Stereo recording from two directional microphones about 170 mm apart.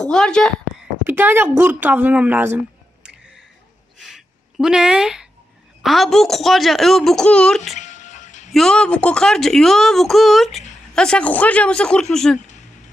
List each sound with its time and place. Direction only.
0.0 s speech: 5° left (ahead or behind)
1.0 s a woman's voice: 10° right (ahead or behind)
4.0 s a sound: centre (ahead or behind)
5.8 s speech: centre (ahead or behind)
7.8 s music: 45° left (ahead or behind)
8.5 s speech: 5° left (ahead or behind)